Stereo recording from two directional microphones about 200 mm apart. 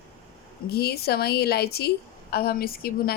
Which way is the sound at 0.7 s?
50° left (ahead or behind).